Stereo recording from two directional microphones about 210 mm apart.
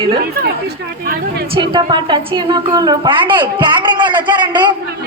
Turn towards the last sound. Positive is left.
turn(degrees=-20)  # may be behind; listen again after turning